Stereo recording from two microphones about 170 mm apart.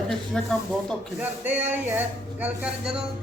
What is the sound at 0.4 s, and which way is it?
Speech, 5° left (ahead or behind).